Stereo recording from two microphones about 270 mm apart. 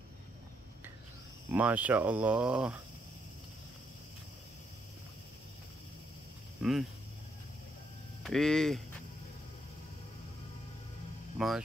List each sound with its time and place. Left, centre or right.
1.5 s speech: centre
6.6 s speech: centre
8.2 s speech: centre
11.3 s speech: centre